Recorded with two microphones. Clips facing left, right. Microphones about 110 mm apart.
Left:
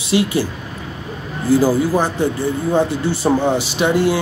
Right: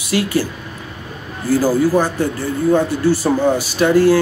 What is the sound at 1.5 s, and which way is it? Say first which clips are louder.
Speech: even; 20° left (ahead or behind).